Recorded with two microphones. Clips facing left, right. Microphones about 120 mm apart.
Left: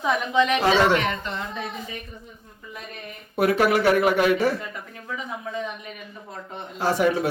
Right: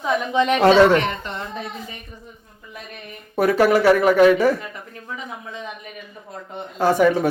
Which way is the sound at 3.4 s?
40° right (ahead or behind).